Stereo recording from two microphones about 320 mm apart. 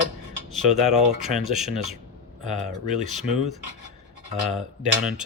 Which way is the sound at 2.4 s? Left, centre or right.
Right.